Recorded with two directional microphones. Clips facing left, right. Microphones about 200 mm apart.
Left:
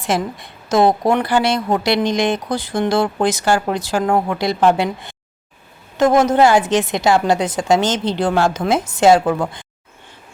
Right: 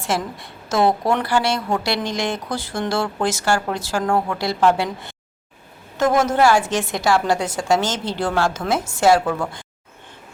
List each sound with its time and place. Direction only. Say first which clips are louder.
0.0 s a woman's voice: left 4 dB; 20° left (ahead or behind)